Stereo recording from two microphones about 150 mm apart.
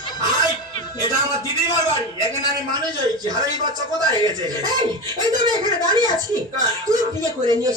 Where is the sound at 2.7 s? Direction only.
25° right (ahead or behind).